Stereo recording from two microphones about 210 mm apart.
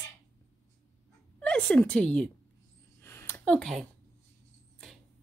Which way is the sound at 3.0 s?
10° left (ahead or behind).